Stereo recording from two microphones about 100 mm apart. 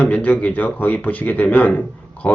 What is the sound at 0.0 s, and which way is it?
Speech, 15° left (ahead or behind).